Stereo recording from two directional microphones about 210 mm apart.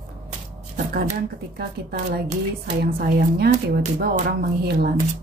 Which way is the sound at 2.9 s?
45° right (ahead or behind).